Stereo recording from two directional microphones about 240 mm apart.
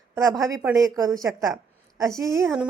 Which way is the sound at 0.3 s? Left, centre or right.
Centre.